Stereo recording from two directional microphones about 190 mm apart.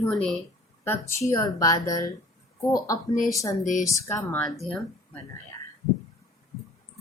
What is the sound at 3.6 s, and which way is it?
Speech, 45° left (ahead or behind).